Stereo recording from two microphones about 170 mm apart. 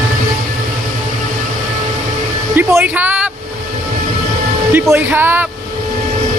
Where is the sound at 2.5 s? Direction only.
15° right (ahead or behind).